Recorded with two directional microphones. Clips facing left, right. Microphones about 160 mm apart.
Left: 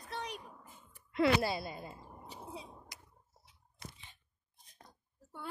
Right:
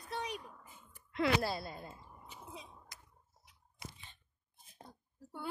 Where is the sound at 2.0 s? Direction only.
35° left (ahead or behind).